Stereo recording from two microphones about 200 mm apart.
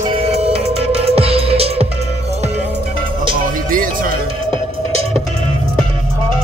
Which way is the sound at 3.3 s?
45° right (ahead or behind).